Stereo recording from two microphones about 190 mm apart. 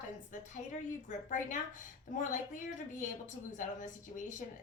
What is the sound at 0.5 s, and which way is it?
A woman's voice, 40° left (ahead or behind).